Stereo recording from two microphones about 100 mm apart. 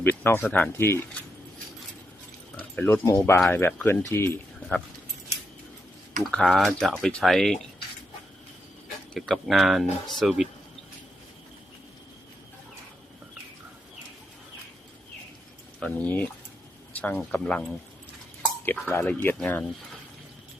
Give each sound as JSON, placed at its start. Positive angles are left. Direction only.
{"t": 0.0, "sound": "speech", "side_deg": 20}
{"t": 2.6, "sound": "a sound", "side_deg": 20}
{"t": 3.1, "sound": "speech", "side_deg": 30}
{"t": 3.5, "sound": "speech", "side_deg": 15}
{"t": 6.3, "sound": "speech", "side_deg": 5}
{"t": 9.1, "sound": "speech", "side_deg": 0}
{"t": 15.8, "sound": "speech", "side_deg": 15}